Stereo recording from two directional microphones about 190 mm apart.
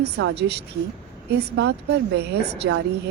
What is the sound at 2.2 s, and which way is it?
Speech, 60° right (ahead or behind).